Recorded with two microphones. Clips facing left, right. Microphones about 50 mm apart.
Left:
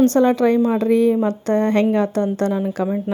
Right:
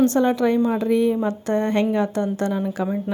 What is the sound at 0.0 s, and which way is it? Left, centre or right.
Speech, left.